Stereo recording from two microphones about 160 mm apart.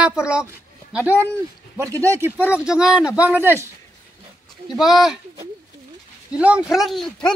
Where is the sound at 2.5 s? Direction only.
5° right (ahead or behind).